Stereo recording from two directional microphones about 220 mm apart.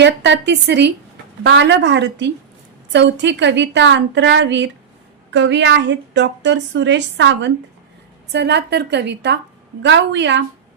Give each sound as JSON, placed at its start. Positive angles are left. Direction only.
{"t": 0.0, "sound": "speech", "side_deg": -55}